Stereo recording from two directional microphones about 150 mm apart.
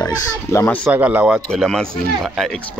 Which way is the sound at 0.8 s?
10° right (ahead or behind).